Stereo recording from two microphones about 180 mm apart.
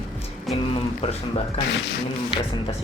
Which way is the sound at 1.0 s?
35° left (ahead or behind).